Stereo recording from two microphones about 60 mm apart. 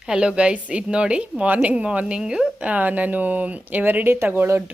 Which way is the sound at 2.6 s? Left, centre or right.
Right.